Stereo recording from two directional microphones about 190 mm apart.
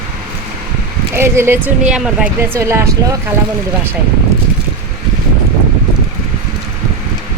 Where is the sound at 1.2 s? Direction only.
10° right (ahead or behind).